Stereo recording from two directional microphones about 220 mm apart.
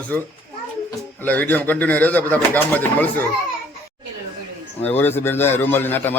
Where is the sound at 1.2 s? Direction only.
10° left (ahead or behind).